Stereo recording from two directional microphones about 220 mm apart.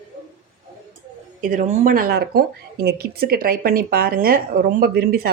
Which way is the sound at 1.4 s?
35° right (ahead or behind).